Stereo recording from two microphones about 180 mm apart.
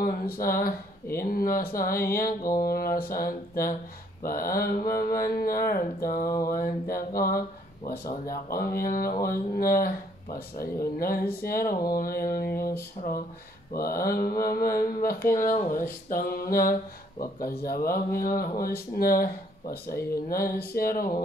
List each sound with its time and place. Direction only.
0.0 s speech: 55° left (ahead or behind)
6.2 s a sound: 20° left (ahead or behind)
6.5 s speech: 55° left (ahead or behind)